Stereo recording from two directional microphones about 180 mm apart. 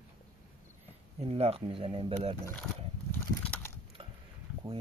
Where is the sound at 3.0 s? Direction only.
10° left (ahead or behind).